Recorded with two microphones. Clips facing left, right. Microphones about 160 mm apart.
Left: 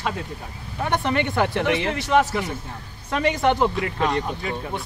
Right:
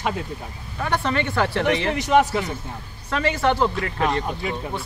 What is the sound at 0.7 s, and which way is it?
Speech, 20° left (ahead or behind).